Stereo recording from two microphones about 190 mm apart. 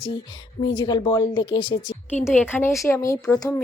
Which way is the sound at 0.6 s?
25° left (ahead or behind).